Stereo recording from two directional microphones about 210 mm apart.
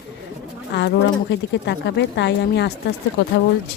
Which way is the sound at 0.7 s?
55° left (ahead or behind).